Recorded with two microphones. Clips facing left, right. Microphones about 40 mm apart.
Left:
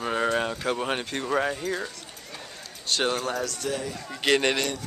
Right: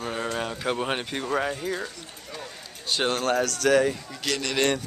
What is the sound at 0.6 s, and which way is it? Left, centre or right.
Speech, centre.